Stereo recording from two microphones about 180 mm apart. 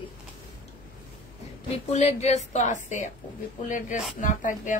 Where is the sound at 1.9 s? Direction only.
35° left (ahead or behind).